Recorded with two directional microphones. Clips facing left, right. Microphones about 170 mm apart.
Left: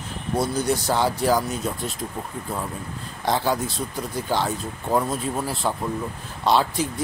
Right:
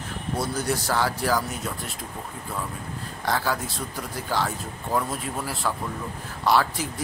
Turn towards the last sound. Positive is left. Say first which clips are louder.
# left 2 dB
turn(degrees=20)  # may be behind; listen again after turning